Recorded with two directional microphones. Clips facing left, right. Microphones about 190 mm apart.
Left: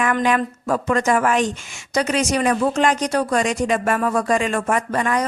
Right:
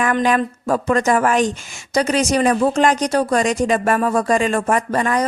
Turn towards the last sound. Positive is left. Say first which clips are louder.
# right 2 dB
turn(degrees=-35)  # may be behind; listen again after turning